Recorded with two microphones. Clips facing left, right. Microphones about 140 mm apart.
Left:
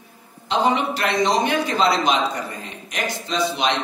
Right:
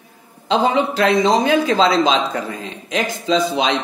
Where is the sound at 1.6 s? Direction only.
90° right.